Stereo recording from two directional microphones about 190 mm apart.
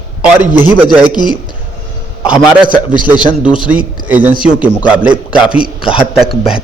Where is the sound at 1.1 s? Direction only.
25° left (ahead or behind).